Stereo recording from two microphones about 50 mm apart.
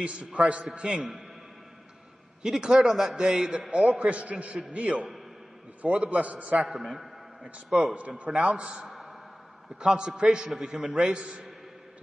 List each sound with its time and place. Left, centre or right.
0.0 s a man's voice: right
2.4 s a man's voice: centre; by 6.7 s right
7.8 s a man's voice: right
8.8 s a sound: centre
9.8 s a man's voice: centre